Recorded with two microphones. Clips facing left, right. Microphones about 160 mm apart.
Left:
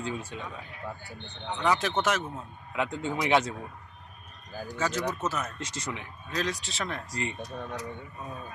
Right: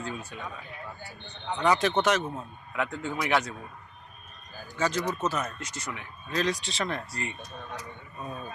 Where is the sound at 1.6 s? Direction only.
5° left (ahead or behind).